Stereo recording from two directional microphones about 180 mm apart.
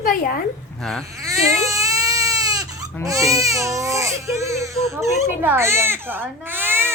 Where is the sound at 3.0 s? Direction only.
20° right (ahead or behind).